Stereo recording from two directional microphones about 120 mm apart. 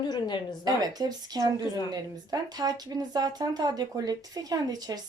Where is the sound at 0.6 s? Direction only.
35° right (ahead or behind).